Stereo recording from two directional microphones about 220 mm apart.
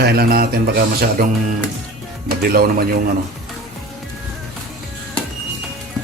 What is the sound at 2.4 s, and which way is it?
Speech, 45° right (ahead or behind).